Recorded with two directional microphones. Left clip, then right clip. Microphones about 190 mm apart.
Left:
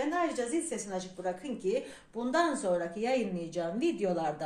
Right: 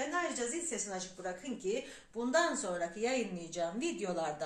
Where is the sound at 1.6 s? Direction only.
45° left (ahead or behind).